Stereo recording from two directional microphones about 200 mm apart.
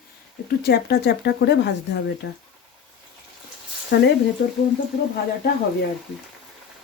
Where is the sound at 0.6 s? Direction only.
55° left (ahead or behind).